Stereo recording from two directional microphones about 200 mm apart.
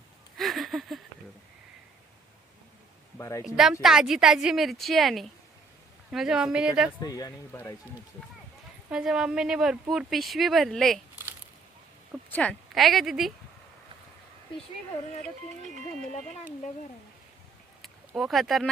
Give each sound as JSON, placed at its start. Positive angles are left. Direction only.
{"t": 0.3, "sound": "a sound", "side_deg": 0}
{"t": 3.2, "sound": "speech", "side_deg": 15}
{"t": 3.4, "sound": "speech", "side_deg": 0}
{"t": 7.0, "sound": "speech", "side_deg": 20}
{"t": 8.9, "sound": "speech", "side_deg": -5}
{"t": 12.3, "sound": "speech", "side_deg": 5}
{"t": 15.2, "sound": "speech", "side_deg": -35}
{"t": 17.8, "sound": "speech", "side_deg": 0}